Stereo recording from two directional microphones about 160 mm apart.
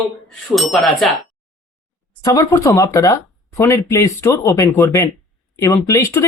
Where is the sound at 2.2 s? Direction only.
20° left (ahead or behind).